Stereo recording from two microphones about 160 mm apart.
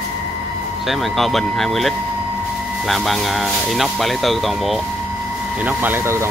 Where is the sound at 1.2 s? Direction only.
Centre (ahead or behind).